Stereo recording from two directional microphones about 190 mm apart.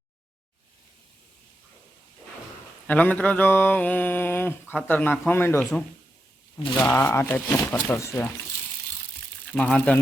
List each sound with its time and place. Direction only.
2.8 s mantra: 10° left (ahead or behind)
9.5 s mantra: 5° left (ahead or behind)